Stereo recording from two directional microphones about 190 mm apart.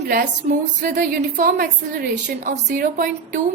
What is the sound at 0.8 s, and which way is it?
A woman's voice, 45° right (ahead or behind).